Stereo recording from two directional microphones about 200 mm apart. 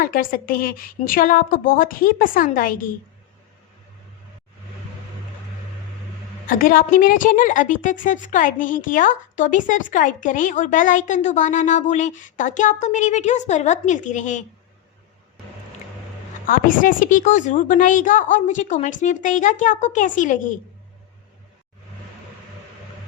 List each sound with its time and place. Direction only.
0.0 s a woman's voice: 45° left (ahead or behind)
6.5 s a woman's voice: 45° left (ahead or behind)
16.5 s a woman's voice: 45° left (ahead or behind)